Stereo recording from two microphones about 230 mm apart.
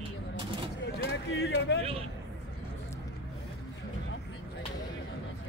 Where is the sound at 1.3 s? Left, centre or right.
Left.